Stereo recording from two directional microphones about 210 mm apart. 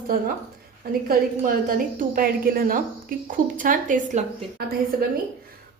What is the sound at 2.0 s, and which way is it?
A woman's voice, 40° right (ahead or behind).